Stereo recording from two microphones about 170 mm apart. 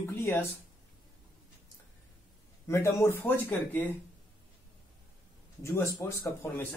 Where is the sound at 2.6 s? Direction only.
15° left (ahead or behind).